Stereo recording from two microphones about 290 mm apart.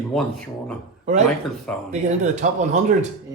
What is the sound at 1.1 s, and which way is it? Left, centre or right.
Speech, right.